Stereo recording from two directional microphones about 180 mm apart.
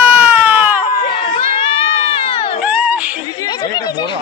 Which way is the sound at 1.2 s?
30° left (ahead or behind).